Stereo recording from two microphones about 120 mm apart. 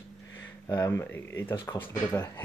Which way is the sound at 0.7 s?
25° left (ahead or behind).